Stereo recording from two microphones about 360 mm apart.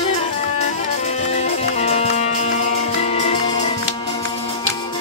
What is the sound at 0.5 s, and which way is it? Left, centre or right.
Music, centre.